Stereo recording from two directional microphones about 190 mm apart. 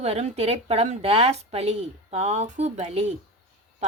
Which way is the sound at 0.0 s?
35° right (ahead or behind).